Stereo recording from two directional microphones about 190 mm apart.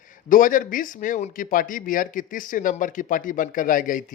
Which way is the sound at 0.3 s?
45° left (ahead or behind).